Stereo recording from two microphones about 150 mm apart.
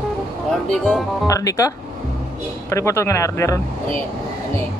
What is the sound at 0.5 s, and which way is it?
Speech, centre (ahead or behind).